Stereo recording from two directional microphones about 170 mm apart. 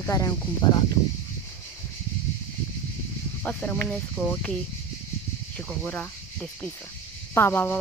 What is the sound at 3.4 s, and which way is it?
Speech, 10° left (ahead or behind).